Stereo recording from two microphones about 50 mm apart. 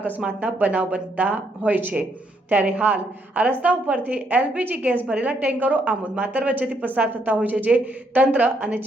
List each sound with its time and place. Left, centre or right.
0.3 s a woman's voice: right